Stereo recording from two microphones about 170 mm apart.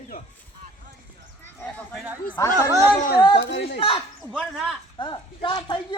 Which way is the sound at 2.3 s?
15° left (ahead or behind).